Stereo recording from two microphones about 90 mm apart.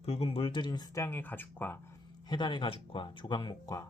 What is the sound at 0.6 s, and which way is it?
Speech, 55° left (ahead or behind).